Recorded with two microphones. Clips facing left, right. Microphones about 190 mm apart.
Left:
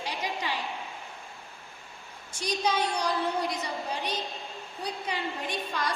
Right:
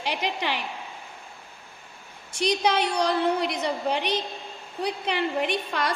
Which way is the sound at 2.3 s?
80° right.